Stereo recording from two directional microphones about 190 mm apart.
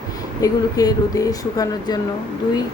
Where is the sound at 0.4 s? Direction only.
20° left (ahead or behind).